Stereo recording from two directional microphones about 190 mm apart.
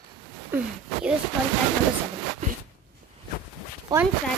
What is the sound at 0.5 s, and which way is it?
Speech, 10° right (ahead or behind).